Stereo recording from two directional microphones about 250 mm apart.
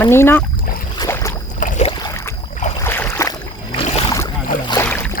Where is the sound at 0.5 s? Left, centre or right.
Left.